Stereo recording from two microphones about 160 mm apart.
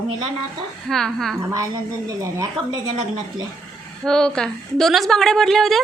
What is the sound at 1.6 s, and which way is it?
A woman's voice, 20° right (ahead or behind).